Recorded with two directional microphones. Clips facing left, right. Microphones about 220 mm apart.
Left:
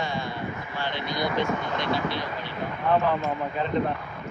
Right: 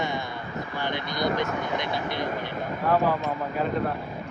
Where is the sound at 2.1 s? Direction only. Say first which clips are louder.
Right 3 dB; 50° right (ahead or behind).